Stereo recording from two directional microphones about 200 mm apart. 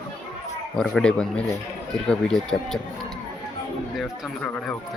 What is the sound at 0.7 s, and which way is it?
Speech, 5° left (ahead or behind).